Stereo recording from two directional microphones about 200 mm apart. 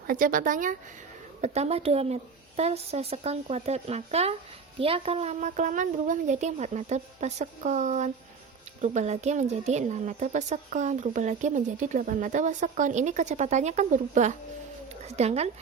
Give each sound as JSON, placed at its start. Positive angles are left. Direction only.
{"t": 0.1, "sound": "a woman's voice", "side_deg": -45}